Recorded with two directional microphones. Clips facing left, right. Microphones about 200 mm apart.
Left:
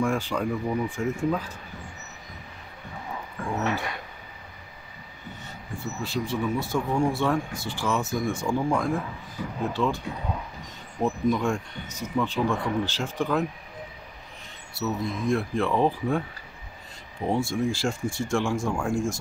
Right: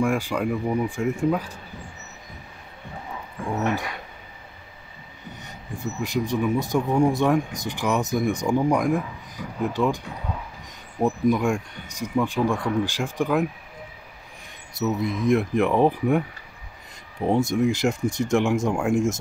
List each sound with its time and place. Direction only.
0.0 s speech: 10° right (ahead or behind)
3.4 s speech: 15° right (ahead or behind)
5.4 s speech: 15° right (ahead or behind)
14.7 s speech: 20° right (ahead or behind)